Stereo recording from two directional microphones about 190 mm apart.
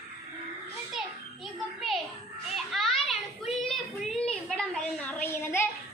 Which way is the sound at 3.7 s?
Centre (ahead or behind).